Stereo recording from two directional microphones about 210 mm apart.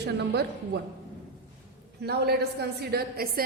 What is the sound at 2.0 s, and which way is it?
A woman's voice, 50° right (ahead or behind).